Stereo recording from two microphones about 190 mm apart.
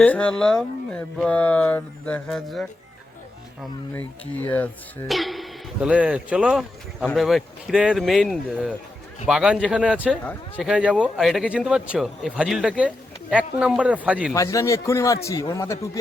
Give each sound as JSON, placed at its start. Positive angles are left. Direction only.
{"t": 0.0, "sound": "speech", "side_deg": 5}
{"t": 3.9, "sound": "a man's voice", "side_deg": 10}
{"t": 14.3, "sound": "speech", "side_deg": 15}